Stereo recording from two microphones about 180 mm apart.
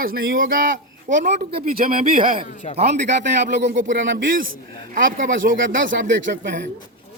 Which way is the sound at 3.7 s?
45° right (ahead or behind).